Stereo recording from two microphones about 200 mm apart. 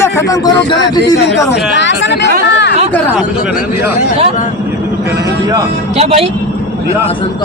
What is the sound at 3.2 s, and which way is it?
Speech, 5° right (ahead or behind).